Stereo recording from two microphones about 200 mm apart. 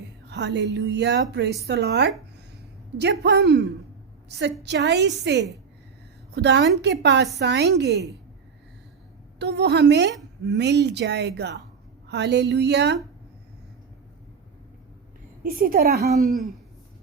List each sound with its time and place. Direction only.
0.3 s a woman's voice: 60° right (ahead or behind)
9.4 s a woman's voice: 55° right (ahead or behind)
15.4 s a woman's voice: 45° right (ahead or behind)
16.1 s speech: centre (ahead or behind)